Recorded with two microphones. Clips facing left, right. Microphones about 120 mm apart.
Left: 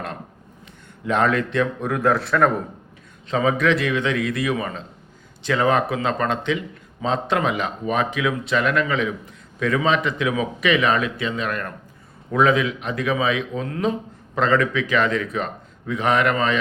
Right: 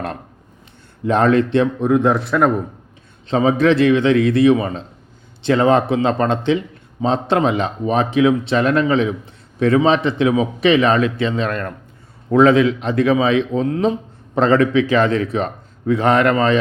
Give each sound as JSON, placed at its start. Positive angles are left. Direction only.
{"t": 1.0, "sound": "speech", "side_deg": -35}
{"t": 2.0, "sound": "a man's voice", "side_deg": 0}
{"t": 3.2, "sound": "speech", "side_deg": -30}